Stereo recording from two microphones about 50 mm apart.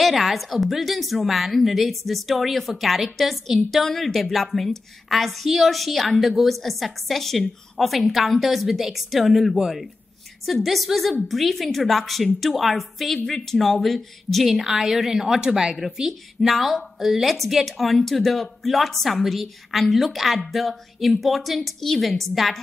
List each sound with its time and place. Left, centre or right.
0.0 s a woman's voice: centre